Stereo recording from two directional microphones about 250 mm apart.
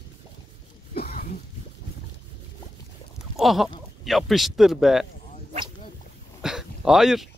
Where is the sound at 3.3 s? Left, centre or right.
Centre.